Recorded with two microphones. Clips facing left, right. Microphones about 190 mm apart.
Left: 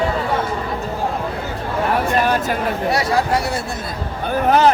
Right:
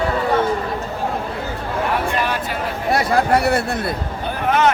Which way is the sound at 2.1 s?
45° left (ahead or behind).